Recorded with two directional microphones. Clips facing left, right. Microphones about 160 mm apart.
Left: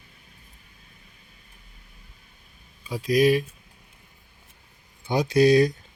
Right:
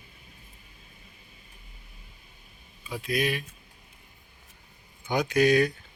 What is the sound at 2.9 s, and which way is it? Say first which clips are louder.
Speech: left 9 dB; 35° left (ahead or behind).